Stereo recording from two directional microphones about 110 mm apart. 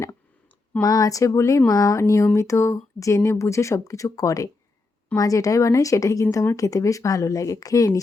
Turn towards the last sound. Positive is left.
turn(degrees=30)  # may be behind; listen again after turning